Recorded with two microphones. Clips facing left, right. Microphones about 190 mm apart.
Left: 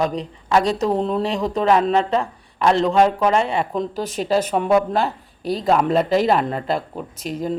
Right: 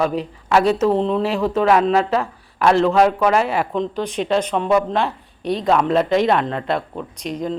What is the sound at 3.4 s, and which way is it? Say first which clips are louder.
Speech: right 1 dB; 30° left (ahead or behind).